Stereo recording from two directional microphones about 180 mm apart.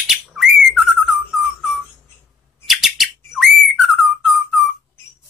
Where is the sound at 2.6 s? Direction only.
Centre (ahead or behind).